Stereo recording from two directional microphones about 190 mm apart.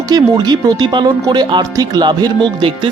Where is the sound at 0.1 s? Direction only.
20° right (ahead or behind).